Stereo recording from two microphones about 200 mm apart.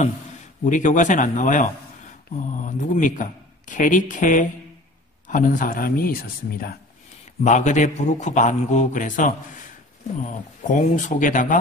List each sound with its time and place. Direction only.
0.7 s a man's voice: 40° left (ahead or behind)
7.4 s a man's voice: 35° left (ahead or behind)